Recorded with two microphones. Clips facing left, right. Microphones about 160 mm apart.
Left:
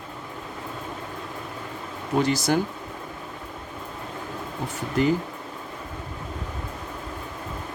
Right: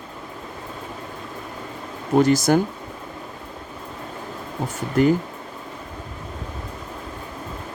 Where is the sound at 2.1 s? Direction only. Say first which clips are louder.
Right 6 dB; 45° right (ahead or behind).